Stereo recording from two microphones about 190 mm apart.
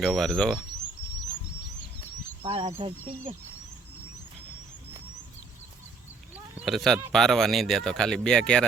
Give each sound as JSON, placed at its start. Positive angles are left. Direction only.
{"t": 0.0, "sound": "speech", "side_deg": 0}
{"t": 2.4, "sound": "speech", "side_deg": -30}
{"t": 6.3, "sound": "a sound", "side_deg": -5}
{"t": 7.1, "sound": "speech", "side_deg": 0}